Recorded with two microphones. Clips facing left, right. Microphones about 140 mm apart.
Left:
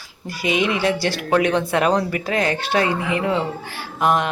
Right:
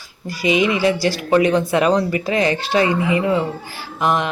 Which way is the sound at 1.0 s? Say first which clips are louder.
Right 3 dB; 55° left (ahead or behind).